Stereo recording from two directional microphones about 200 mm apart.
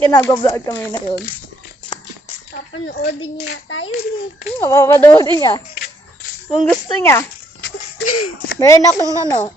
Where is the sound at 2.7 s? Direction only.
60° left (ahead or behind).